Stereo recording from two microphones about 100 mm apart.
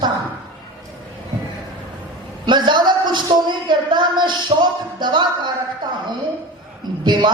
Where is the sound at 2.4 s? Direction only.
50° right (ahead or behind).